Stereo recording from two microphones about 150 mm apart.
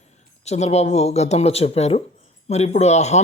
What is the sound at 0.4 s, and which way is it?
Speech, 45° left (ahead or behind).